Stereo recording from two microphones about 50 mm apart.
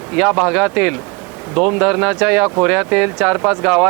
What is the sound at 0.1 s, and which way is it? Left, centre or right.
Speech, centre.